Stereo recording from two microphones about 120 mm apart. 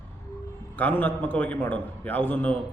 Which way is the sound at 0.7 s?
15° left (ahead or behind).